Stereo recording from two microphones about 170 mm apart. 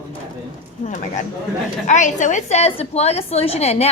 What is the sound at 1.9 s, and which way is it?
A woman's voice, 45° left (ahead or behind).